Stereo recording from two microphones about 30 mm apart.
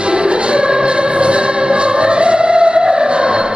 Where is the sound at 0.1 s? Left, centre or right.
Right.